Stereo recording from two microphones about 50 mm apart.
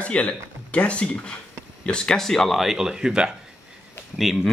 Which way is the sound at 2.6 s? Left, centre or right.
Centre.